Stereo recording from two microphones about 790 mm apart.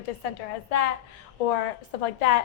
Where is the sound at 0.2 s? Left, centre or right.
Left.